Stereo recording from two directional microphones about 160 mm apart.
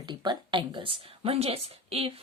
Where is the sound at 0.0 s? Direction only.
25° right (ahead or behind).